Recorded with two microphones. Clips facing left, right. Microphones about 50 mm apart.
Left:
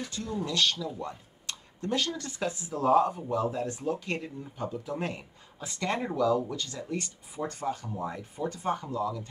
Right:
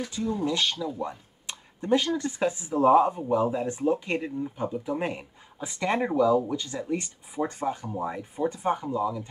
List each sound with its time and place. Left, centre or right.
0.1 s speech: centre